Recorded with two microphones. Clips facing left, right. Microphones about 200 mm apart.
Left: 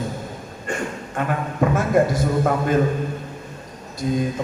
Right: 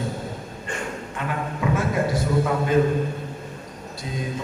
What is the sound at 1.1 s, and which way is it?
Speech, 50° left (ahead or behind).